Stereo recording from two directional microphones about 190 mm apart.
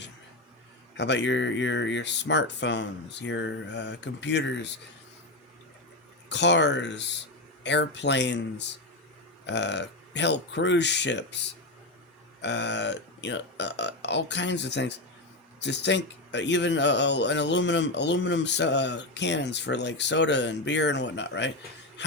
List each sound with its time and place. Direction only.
0.9 s speech: 65° left (ahead or behind)
6.2 s speech: 65° left (ahead or behind)